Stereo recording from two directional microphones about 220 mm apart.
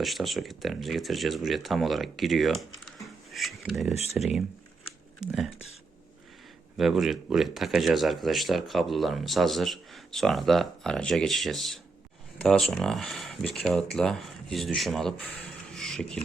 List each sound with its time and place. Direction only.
0.0 s speech: centre (ahead or behind)
3.9 s speech: 30° left (ahead or behind)
6.7 s speech: centre (ahead or behind)